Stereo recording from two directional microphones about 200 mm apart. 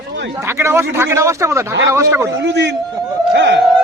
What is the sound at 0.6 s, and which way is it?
A man's voice, 10° right (ahead or behind).